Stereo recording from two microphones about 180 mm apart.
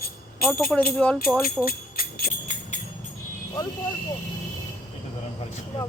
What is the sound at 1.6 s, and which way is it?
Jingle bell, 55° left (ahead or behind).